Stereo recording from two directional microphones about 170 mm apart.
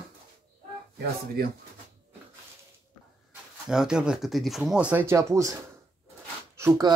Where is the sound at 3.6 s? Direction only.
5° right (ahead or behind).